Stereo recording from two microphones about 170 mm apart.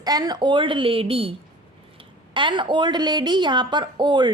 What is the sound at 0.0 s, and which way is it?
A woman's voice, 25° right (ahead or behind).